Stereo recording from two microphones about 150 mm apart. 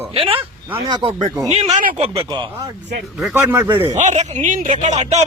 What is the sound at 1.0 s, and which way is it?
Speech, 30° right (ahead or behind).